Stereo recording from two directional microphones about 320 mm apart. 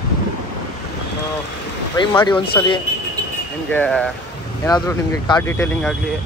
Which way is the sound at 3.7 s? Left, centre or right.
Centre.